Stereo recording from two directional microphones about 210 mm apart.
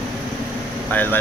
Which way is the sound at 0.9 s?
10° left (ahead or behind).